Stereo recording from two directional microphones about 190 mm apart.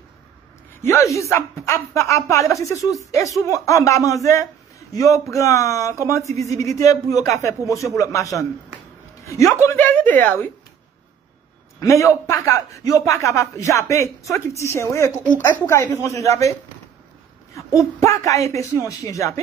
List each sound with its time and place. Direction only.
0.8 s a man's voice: 15° left (ahead or behind)
11.8 s a man's voice: 15° left (ahead or behind)
18.0 s a man's voice: 15° left (ahead or behind)